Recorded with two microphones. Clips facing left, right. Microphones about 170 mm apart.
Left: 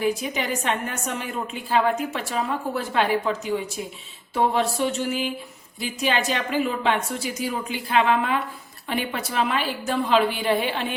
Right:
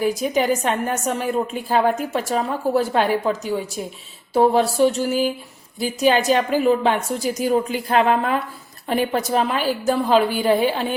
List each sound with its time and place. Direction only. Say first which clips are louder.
0.0 s a woman's voice: right 5 dB; 40° right (ahead or behind)